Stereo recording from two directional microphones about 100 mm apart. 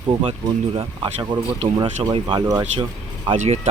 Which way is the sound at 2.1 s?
55° right (ahead or behind).